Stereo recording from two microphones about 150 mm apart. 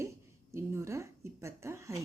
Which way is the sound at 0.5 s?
20° right (ahead or behind).